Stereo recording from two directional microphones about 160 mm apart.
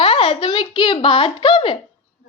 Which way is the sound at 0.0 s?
35° left (ahead or behind).